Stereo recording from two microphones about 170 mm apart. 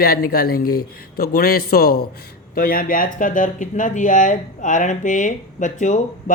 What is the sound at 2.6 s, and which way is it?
Speech, 60° left (ahead or behind).